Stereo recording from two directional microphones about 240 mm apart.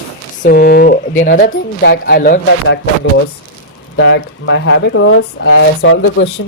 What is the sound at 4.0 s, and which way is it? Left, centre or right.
Speech, left.